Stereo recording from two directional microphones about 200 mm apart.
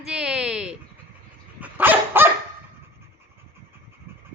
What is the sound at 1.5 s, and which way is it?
Dog, 10° right (ahead or behind).